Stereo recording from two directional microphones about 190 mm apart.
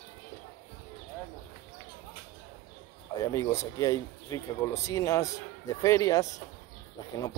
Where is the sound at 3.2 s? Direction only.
15° left (ahead or behind).